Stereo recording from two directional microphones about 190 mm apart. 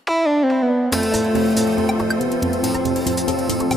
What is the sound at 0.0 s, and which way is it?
Music, centre (ahead or behind).